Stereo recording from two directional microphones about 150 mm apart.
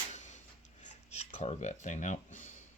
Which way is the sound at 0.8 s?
45° left (ahead or behind).